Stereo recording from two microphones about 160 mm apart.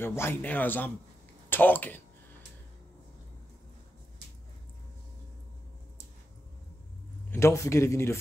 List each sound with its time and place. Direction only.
0.0 s speech: 15° left (ahead or behind)
1.5 s a sound: 10° left (ahead or behind)
7.2 s speech: 15° left (ahead or behind)